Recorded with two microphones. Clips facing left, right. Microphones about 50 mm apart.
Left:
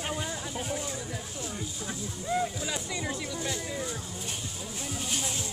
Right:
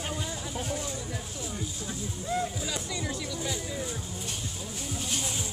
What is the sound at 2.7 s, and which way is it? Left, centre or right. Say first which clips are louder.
Speech: even; left.